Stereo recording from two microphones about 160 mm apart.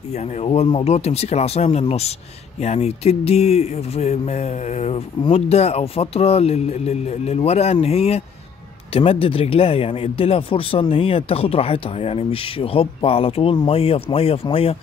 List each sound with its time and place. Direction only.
0.1 s speech: 45° left (ahead or behind)